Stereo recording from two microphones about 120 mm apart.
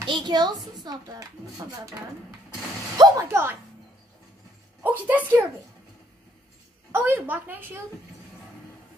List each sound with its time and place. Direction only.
0.0 s a woman's voice: 40° right (ahead or behind)
3.0 s speech: 25° right (ahead or behind)
4.8 s a woman's voice: 15° right (ahead or behind)
6.9 s a woman's voice: 20° right (ahead or behind)